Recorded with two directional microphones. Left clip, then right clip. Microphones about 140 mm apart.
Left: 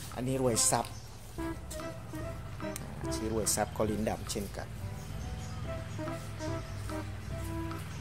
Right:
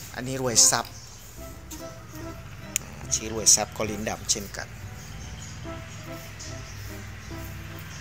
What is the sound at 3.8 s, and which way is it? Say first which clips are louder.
Speech: right 3 dB; 15° left (ahead or behind).